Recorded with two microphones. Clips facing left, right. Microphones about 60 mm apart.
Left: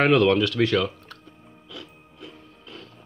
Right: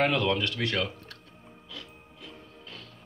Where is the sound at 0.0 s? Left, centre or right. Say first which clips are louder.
Left 7 dB; left.